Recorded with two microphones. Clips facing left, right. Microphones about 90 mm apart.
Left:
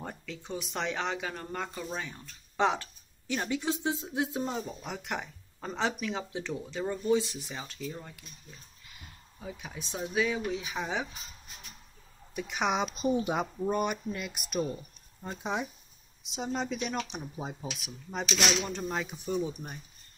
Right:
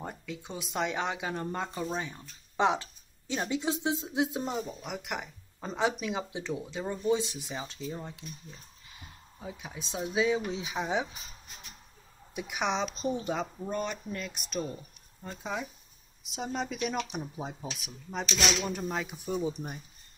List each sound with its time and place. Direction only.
0.0 s speech: 15° right (ahead or behind)
4.5 s speech: 5° right (ahead or behind); by 8.3 s 20° right (ahead or behind)
9.4 s speech: 20° right (ahead or behind)
12.5 s speech: 5° left (ahead or behind)
15.2 s speech: 20° left (ahead or behind)
16.3 s speech: centre (ahead or behind)